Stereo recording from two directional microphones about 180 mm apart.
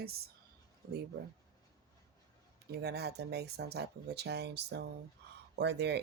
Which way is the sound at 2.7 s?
65° right (ahead or behind).